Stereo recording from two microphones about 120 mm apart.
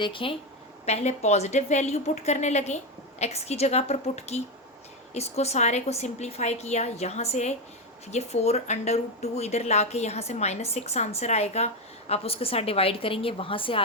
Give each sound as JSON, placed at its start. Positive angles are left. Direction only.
{"t": 0.0, "sound": "speech", "side_deg": 45}
{"t": 0.9, "sound": "a woman's voice", "side_deg": 65}